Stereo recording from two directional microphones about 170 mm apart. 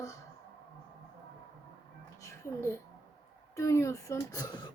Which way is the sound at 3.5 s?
15° left (ahead or behind).